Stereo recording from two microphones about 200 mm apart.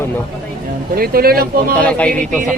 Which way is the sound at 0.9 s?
50° right (ahead or behind).